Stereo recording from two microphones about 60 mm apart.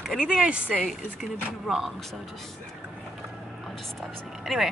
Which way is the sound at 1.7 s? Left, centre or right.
Centre.